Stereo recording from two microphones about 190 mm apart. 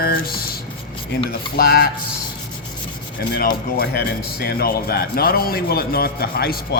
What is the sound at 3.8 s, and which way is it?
A man's voice, 55° left (ahead or behind).